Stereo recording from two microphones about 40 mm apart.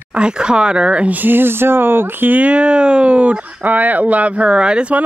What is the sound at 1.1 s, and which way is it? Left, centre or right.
Speech, right.